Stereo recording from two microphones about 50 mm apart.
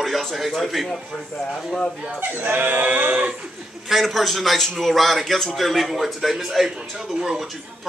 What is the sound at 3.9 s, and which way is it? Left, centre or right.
A man's voice, centre.